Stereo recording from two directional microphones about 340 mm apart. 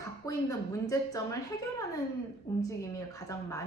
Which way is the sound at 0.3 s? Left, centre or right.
Centre.